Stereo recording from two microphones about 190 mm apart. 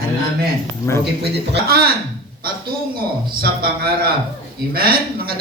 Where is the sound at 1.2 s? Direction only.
55° right (ahead or behind).